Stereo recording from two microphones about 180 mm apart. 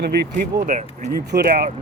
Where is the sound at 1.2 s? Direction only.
65° right (ahead or behind).